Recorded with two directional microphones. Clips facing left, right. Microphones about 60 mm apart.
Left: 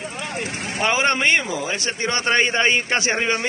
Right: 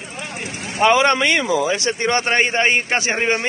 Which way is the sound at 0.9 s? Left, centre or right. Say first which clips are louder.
Even; right.